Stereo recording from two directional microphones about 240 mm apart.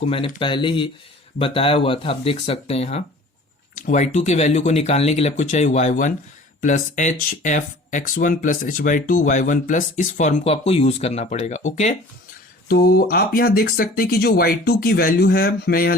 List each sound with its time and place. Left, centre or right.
0.0 s speech: left